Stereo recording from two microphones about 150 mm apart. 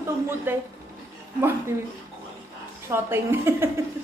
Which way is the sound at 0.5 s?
15° right (ahead or behind).